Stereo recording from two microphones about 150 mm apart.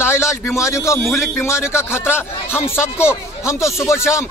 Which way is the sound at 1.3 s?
15° left (ahead or behind).